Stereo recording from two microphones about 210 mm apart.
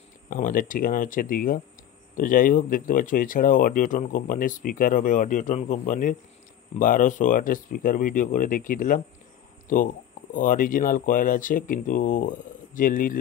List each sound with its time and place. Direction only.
0.3 s speech: 40° left (ahead or behind)